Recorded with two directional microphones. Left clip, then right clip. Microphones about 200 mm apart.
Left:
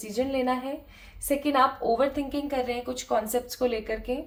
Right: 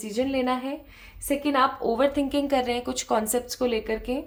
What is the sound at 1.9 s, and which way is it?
A woman's voice, 40° right (ahead or behind).